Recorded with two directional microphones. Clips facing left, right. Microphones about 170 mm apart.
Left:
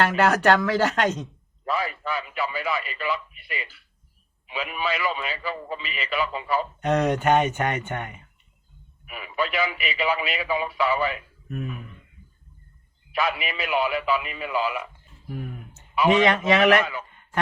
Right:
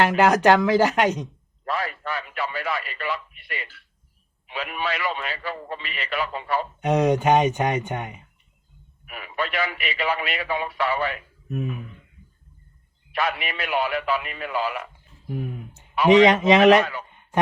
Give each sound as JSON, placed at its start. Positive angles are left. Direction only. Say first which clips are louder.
{"t": 0.2, "sound": "speech", "louder": "right 3 dB", "side_deg": -15}
{"t": 1.6, "sound": "a man's voice", "louder": "left 1 dB", "side_deg": 0}
{"t": 6.7, "sound": "speech", "louder": "right 4 dB", "side_deg": -10}
{"t": 9.0, "sound": "a man's voice", "louder": "left 1 dB", "side_deg": 0}
{"t": 11.4, "sound": "speech", "louder": "right 4 dB", "side_deg": -20}
{"t": 13.1, "sound": "a man's voice", "louder": "even", "side_deg": 0}
{"t": 15.3, "sound": "a man's voice", "louder": "right 4 dB", "side_deg": -20}
{"t": 16.8, "sound": "a man's voice", "louder": "even", "side_deg": 0}